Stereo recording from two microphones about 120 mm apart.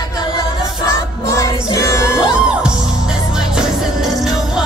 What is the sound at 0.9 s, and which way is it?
Music, 25° left (ahead or behind).